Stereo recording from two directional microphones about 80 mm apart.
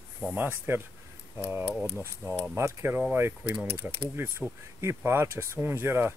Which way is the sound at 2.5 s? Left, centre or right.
Right.